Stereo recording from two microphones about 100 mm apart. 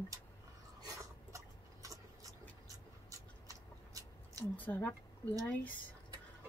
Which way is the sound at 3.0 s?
35° right (ahead or behind).